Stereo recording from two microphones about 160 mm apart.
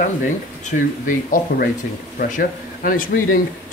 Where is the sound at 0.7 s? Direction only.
55° left (ahead or behind).